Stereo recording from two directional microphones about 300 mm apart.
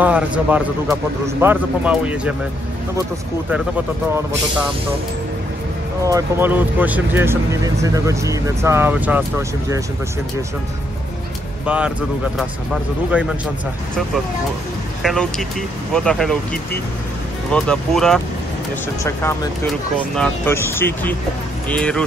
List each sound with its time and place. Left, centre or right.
0.0 s speech: centre
6.0 s speech: centre
11.6 s speech: centre
13.1 s speech: centre
15.0 s speech: centre
17.5 s speech: centre
20.2 s speech: centre